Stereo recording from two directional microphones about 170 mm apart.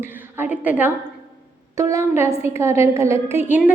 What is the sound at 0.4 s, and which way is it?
A woman's voice, 10° right (ahead or behind).